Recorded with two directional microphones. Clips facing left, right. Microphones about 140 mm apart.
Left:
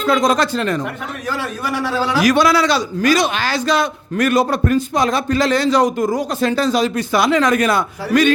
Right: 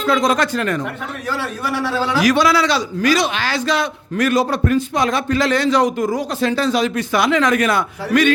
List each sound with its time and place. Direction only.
0.0 s a man's voice: 45° left (ahead or behind)
1.4 s a man's voice: 15° left (ahead or behind)
2.1 s a man's voice: 50° left (ahead or behind)